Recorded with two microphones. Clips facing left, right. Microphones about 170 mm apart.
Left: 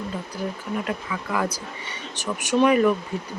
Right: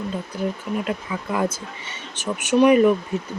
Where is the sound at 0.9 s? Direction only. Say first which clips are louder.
Right 2 dB; 25° right (ahead or behind).